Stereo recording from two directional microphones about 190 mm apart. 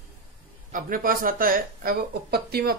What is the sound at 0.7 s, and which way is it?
Speech, 45° right (ahead or behind).